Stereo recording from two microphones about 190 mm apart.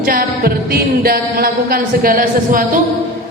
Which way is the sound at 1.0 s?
50° right (ahead or behind).